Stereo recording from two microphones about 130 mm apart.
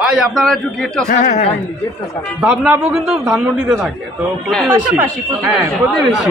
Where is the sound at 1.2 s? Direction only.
70° left (ahead or behind).